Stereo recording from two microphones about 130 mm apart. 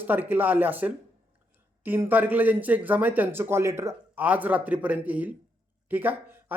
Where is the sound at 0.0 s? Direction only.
15° right (ahead or behind).